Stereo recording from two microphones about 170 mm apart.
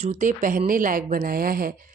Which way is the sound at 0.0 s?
45° right (ahead or behind).